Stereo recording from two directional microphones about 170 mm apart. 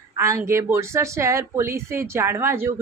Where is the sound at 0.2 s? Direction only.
15° right (ahead or behind).